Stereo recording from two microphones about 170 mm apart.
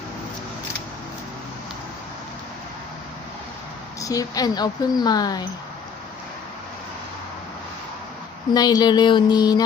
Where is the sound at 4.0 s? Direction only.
20° left (ahead or behind).